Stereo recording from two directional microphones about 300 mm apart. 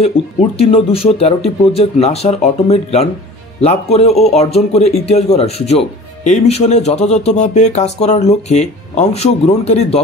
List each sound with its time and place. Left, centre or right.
0.6 s speech: centre